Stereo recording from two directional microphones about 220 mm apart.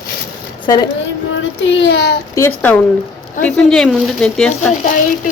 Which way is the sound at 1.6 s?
50° left (ahead or behind).